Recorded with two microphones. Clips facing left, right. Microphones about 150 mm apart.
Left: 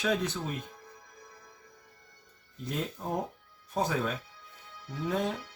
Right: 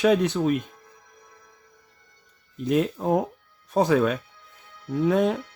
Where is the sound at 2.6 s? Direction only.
80° right.